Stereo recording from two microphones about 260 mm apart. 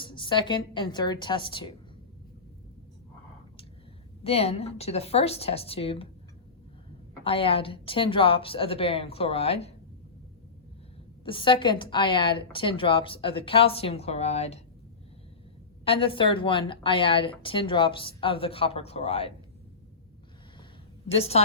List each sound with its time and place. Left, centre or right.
0.0 s a woman's voice: centre
4.2 s a woman's voice: left
7.3 s a woman's voice: left
11.3 s a woman's voice: centre
15.8 s a woman's voice: left
21.1 s a woman's voice: left